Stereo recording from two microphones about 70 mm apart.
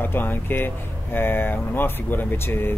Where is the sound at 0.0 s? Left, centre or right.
Left.